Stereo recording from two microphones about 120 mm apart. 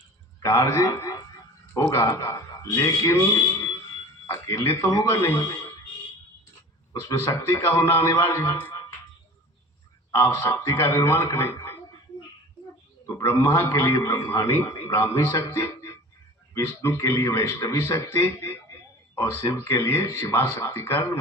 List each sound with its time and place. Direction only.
0.3 s a man's voice: 25° left (ahead or behind)
4.4 s a man's voice: 20° left (ahead or behind)
6.9 s a man's voice: 25° left (ahead or behind)
10.1 s a man's voice: 25° left (ahead or behind)
13.1 s a man's voice: 25° left (ahead or behind)